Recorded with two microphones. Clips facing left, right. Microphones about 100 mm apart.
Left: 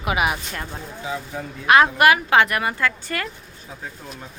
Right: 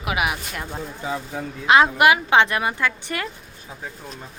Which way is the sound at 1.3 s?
20° right (ahead or behind).